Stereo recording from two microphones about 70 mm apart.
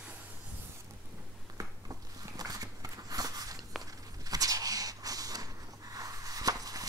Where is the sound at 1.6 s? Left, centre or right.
Right.